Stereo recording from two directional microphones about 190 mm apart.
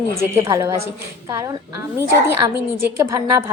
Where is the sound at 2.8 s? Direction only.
15° right (ahead or behind).